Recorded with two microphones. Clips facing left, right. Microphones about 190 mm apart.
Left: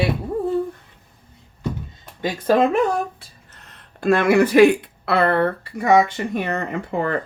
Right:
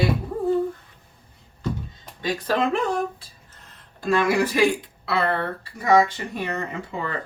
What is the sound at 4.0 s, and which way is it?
Speech, 60° left (ahead or behind).